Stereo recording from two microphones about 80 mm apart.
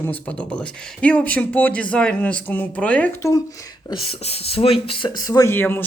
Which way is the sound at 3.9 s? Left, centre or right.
Left.